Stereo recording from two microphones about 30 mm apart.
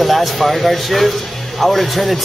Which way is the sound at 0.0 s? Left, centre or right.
Centre.